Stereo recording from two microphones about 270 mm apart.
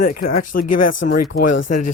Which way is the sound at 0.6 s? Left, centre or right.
Left.